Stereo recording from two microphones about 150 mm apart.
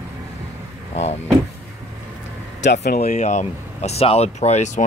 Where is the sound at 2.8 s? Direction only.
90° left.